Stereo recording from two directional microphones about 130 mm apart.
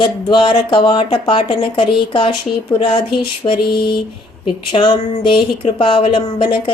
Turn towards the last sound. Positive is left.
turn(degrees=40)  # may be behind; listen again after turning